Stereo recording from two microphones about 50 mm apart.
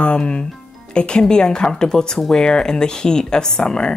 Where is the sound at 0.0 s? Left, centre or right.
Left.